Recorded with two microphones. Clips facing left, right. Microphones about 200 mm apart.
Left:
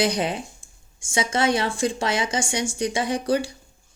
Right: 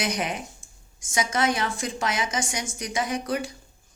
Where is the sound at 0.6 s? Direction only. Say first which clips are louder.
Even; 35° left (ahead or behind).